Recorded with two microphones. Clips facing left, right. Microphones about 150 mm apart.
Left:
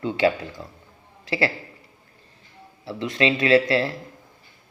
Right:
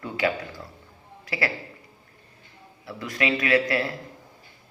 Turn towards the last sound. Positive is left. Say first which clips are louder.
# left 4 dB
turn(degrees=30)  # may be behind; listen again after turning